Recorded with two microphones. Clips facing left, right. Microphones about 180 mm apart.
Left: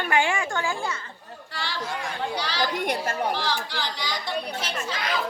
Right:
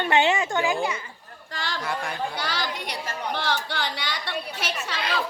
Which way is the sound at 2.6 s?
50° left (ahead or behind).